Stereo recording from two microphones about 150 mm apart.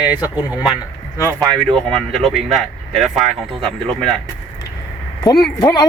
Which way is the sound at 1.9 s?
Centre (ahead or behind).